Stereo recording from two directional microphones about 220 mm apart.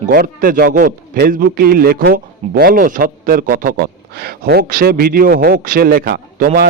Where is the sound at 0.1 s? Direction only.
40° right (ahead or behind).